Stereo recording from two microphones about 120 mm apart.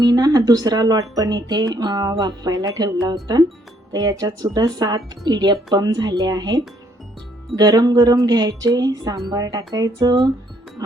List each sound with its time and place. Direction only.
0.0 s speech: 30° right (ahead or behind)